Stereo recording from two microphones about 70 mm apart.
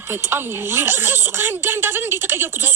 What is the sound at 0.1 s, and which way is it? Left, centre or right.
A woman's voice, right.